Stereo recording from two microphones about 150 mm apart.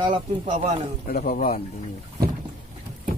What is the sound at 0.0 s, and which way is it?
Speech, 40° right (ahead or behind).